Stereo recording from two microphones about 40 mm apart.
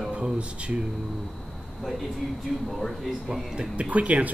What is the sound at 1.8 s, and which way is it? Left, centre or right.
Speech, centre.